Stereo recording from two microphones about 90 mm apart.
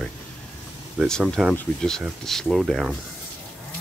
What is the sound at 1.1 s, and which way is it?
Speech, 5° left (ahead or behind).